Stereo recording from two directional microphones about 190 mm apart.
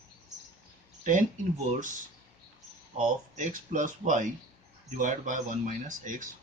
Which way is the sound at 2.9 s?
45° right (ahead or behind).